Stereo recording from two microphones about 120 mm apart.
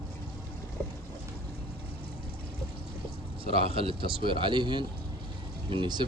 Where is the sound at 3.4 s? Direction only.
55° right (ahead or behind).